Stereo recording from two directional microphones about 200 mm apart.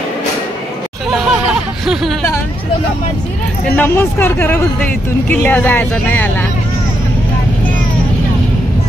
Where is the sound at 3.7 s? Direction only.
10° left (ahead or behind).